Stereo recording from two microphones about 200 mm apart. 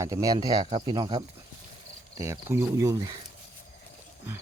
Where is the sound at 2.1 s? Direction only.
15° right (ahead or behind).